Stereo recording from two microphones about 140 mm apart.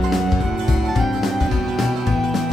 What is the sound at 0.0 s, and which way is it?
Music, centre (ahead or behind).